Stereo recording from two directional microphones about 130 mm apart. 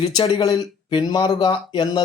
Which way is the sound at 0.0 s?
40° left (ahead or behind).